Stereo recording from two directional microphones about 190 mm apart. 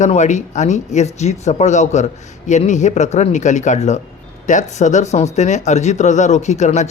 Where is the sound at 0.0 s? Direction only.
40° left (ahead or behind).